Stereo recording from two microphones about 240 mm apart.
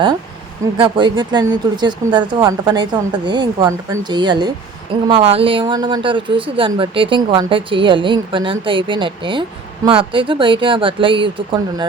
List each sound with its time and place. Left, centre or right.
0.8 s speech: centre